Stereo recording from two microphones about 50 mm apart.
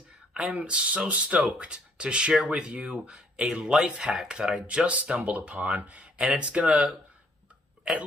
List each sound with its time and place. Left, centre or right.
0.5 s speech: right